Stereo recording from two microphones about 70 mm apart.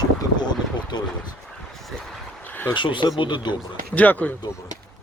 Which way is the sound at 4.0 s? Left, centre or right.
Left.